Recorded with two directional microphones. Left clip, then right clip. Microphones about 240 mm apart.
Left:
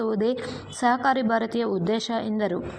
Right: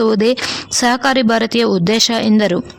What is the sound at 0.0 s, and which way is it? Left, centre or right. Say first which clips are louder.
A woman's voice: right 11 dB; right.